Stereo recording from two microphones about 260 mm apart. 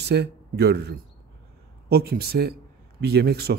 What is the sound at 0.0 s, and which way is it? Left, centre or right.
A man's voice, right.